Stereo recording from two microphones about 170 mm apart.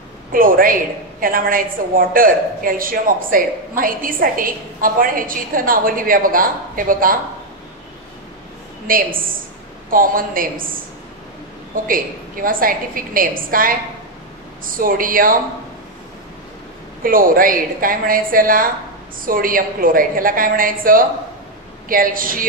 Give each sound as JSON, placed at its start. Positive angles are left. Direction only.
{"t": 0.3, "sound": "a woman's voice", "side_deg": -55}
{"t": 8.8, "sound": "a woman's voice", "side_deg": -55}
{"t": 11.7, "sound": "a woman's voice", "side_deg": -55}
{"t": 17.0, "sound": "a woman's voice", "side_deg": -55}